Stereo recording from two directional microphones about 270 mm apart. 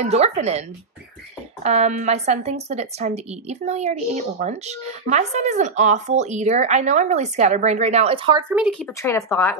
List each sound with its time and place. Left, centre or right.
0.0 s a woman's voice: right
8.5 s speech: centre
9.0 s speech: centre